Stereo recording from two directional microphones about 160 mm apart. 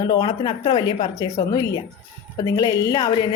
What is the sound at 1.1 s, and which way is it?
A woman's voice, 20° left (ahead or behind).